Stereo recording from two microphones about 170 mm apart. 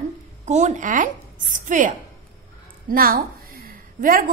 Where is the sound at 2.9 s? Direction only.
60° right (ahead or behind).